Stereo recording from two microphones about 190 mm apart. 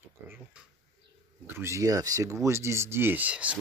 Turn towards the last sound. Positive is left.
turn(degrees=-5)  # may be behind; listen again after turning